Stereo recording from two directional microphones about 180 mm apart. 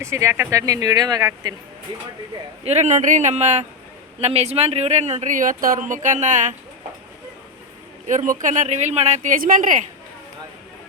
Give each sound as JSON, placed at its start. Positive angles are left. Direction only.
{"t": 0.0, "sound": "speech", "side_deg": -15}
{"t": 2.6, "sound": "speech", "side_deg": -40}
{"t": 8.0, "sound": "speech", "side_deg": -45}